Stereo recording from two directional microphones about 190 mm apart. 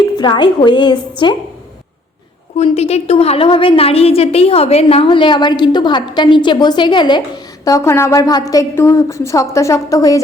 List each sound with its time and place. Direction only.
0.2 s a woman's voice: 25° left (ahead or behind)
2.6 s a woman's voice: 35° left (ahead or behind); by 10.2 s 20° left (ahead or behind)